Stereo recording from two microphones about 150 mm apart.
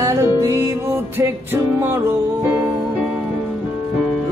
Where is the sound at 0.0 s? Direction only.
20° right (ahead or behind).